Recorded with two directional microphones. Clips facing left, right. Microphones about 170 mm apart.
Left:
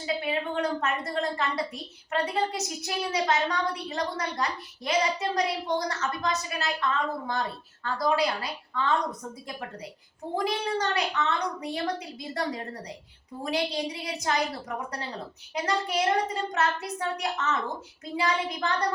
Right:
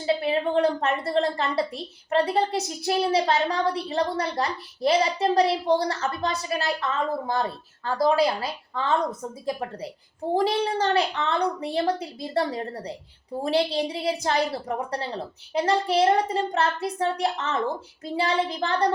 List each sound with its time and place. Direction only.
0.0 s a woman's voice: 30° right (ahead or behind)
7.9 s a woman's voice: 30° right (ahead or behind)
10.3 s a woman's voice: 30° right (ahead or behind)